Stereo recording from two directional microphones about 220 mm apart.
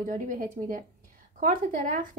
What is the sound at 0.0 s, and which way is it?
Speech, 40° right (ahead or behind).